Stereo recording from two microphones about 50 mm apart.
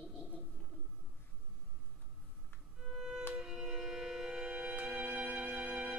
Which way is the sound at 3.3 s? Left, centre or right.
Centre.